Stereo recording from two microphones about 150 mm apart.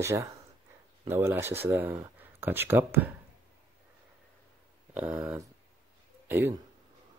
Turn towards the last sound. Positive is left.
turn(degrees=-15)  # may be behind; listen again after turning